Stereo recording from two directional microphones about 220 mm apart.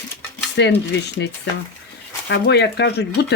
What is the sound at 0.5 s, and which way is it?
Speech, 50° left (ahead or behind).